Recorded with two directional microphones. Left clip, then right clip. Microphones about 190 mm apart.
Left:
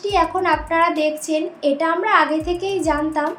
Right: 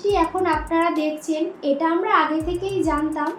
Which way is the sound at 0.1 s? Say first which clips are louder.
Left 3 dB; 50° left (ahead or behind).